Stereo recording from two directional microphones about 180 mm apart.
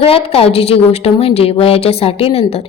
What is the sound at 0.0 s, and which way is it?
A woman's voice, 30° left (ahead or behind).